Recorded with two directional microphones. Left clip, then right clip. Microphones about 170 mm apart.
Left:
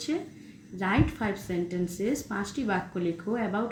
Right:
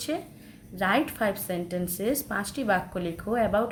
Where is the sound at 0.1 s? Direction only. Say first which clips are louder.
Even; 25° right (ahead or behind).